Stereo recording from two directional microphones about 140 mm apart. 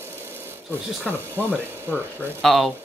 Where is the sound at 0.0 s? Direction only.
15° right (ahead or behind).